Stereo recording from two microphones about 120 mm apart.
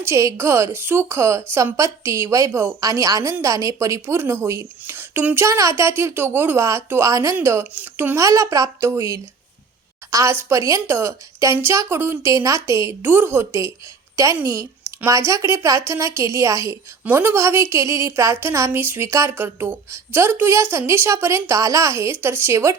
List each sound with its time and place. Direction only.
0.0 s a woman's voice: 25° right (ahead or behind)